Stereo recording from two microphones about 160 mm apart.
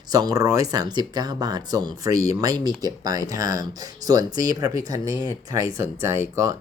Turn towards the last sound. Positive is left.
turn(degrees=-15)  # may be behind; listen again after turning